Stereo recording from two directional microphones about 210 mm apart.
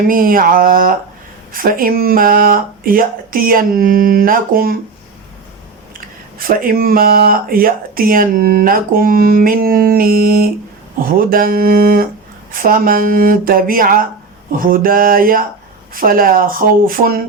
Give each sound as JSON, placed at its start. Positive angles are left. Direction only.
{"t": 0.1, "sound": "speech", "side_deg": -40}
{"t": 6.5, "sound": "speech", "side_deg": -45}